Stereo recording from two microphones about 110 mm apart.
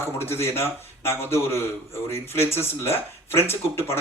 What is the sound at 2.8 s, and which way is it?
Speech, 20° left (ahead or behind).